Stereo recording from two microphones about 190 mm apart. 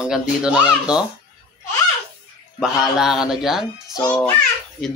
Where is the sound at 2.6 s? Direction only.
Centre (ahead or behind).